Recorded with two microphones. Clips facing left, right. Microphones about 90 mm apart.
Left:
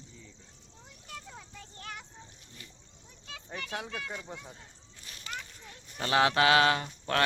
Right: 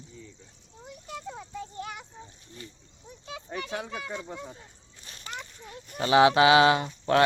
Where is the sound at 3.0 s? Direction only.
20° right (ahead or behind).